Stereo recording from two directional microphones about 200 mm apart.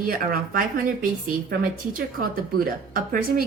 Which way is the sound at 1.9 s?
45° right (ahead or behind).